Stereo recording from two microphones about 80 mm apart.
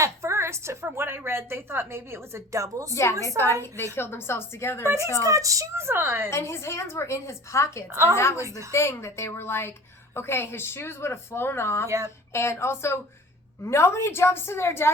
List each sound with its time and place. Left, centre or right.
0.0 s a woman's voice: right
2.9 s a woman's voice: left
5.2 s a woman's voice: right
6.3 s speech: left
8.4 s a woman's voice: right
8.7 s speech: left
11.9 s a woman's voice: right
12.3 s speech: left